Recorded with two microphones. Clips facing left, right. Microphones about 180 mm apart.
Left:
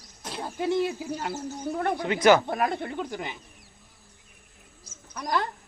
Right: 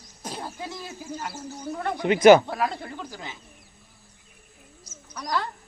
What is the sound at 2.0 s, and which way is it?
Speech, 20° right (ahead or behind).